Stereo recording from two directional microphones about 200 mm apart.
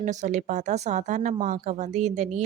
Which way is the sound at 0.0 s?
35° right (ahead or behind).